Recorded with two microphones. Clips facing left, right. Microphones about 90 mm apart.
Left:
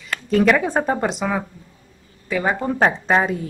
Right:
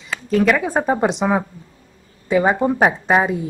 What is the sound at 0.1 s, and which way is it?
Speech, centre (ahead or behind).